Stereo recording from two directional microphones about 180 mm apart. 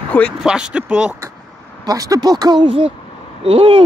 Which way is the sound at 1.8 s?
20° right (ahead or behind).